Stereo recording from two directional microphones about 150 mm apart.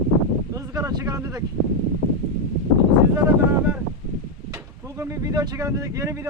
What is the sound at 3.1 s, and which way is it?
Speech, 15° right (ahead or behind).